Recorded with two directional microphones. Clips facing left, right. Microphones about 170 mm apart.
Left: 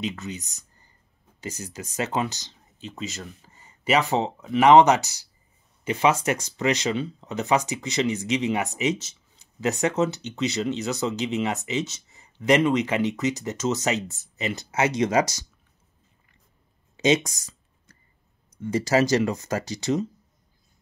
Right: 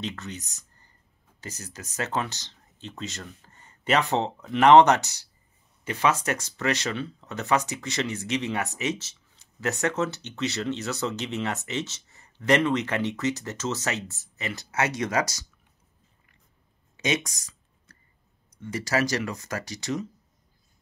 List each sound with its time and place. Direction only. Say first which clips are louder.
0.0 s speech: left 4 dB; 10° left (ahead or behind)
16.9 s a sound: left 7 dB; 25° left (ahead or behind)
18.6 s speech: left 5 dB; 25° left (ahead or behind)